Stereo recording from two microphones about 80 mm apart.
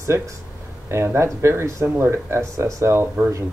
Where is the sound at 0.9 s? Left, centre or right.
Right.